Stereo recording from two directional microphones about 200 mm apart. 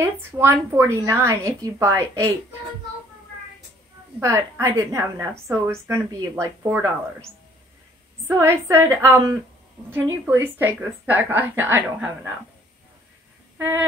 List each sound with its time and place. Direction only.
0.0 s a woman's voice: 10° right (ahead or behind)
4.2 s a woman's voice: 15° right (ahead or behind)
8.3 s a woman's voice: 15° right (ahead or behind)